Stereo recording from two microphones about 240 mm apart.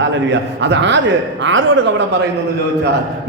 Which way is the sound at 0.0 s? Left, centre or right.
Right.